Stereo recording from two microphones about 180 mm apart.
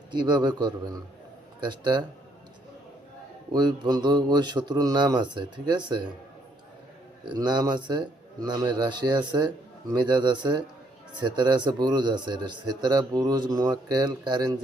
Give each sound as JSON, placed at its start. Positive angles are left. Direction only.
{"t": 0.1, "sound": "speech", "side_deg": -25}
{"t": 3.5, "sound": "speech", "side_deg": -20}
{"t": 7.3, "sound": "speech", "side_deg": -25}